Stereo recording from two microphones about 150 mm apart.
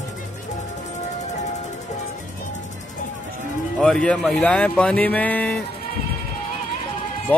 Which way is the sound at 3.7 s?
5° left (ahead or behind).